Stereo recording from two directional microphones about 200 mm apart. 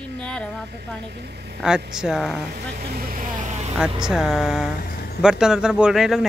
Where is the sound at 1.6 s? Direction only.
5° right (ahead or behind).